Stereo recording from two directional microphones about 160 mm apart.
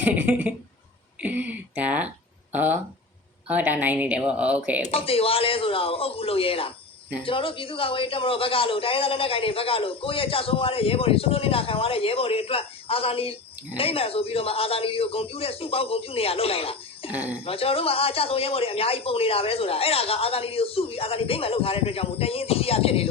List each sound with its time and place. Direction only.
0.0 s speech: 10° right (ahead or behind)
4.9 s a man's voice: 35° left (ahead or behind)
17.1 s speech: 10° right (ahead or behind)
17.4 s a man's voice: 35° left (ahead or behind)